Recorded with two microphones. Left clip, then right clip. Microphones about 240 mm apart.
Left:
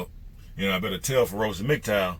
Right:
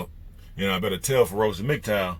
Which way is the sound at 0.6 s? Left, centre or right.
Right.